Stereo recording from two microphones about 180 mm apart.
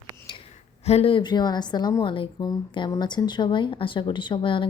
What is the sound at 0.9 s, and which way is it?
Speech, 35° left (ahead or behind).